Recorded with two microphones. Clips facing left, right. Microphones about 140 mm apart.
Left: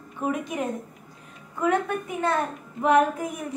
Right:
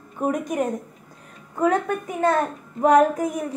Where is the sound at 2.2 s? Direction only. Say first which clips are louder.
Right 6 dB; 40° right (ahead or behind).